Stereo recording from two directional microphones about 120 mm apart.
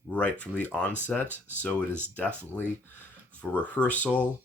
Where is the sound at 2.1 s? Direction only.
15° left (ahead or behind).